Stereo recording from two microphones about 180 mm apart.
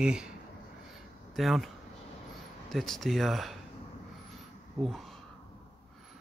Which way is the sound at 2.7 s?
Centre (ahead or behind).